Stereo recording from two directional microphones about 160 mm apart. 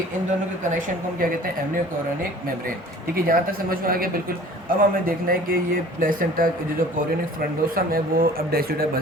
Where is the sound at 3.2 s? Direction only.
65° right (ahead or behind).